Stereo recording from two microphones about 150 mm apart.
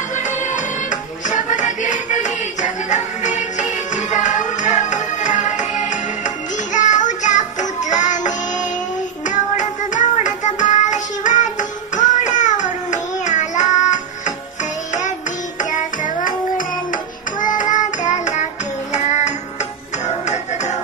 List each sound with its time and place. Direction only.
1.3 s music: 55° left (ahead or behind)
9.3 s music: 55° left (ahead or behind)
12.0 s child singing: 55° left (ahead or behind)
15.7 s music: 60° left (ahead or behind)
17.4 s child singing: 60° left (ahead or behind)
18.9 s music: 50° left (ahead or behind)